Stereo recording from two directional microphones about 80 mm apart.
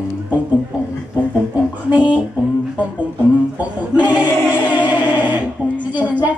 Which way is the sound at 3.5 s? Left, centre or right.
Centre.